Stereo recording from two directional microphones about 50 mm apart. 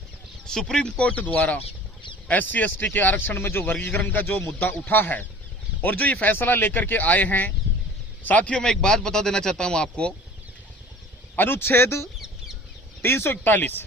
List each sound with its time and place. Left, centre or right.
0.6 s speech: centre
1.1 s speech: left
8.5 s speech: centre
11.3 s speech: left
13.3 s speech: left